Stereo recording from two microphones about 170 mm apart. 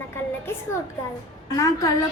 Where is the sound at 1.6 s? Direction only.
20° left (ahead or behind).